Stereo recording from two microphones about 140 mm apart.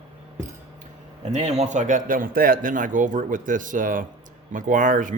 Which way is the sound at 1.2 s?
55° right (ahead or behind).